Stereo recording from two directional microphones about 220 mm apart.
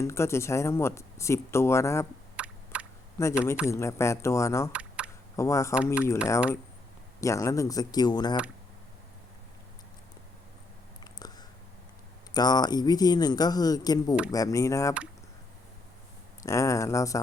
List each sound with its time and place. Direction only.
0.0 s speech: 10° left (ahead or behind)
2.3 s a sound: 5° right (ahead or behind)
3.2 s speech: 15° left (ahead or behind)
4.7 s a sound: 5° right (ahead or behind)
5.4 s speech: 15° left (ahead or behind)
5.7 s speech: 5° right (ahead or behind)
7.2 s speech: 15° left (ahead or behind)
11.0 s a sound: 20° left (ahead or behind)
12.3 s speech: 20° left (ahead or behind)
16.4 s speech: 15° left (ahead or behind)